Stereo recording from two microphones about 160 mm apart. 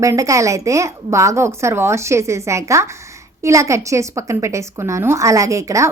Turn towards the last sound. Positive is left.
turn(degrees=-20)  # may be behind; listen again after turning